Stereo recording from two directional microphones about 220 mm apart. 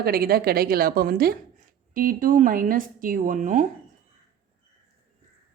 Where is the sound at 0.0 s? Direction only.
45° right (ahead or behind).